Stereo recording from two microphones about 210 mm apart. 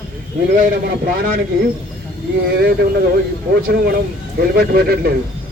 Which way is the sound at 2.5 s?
50° right (ahead or behind).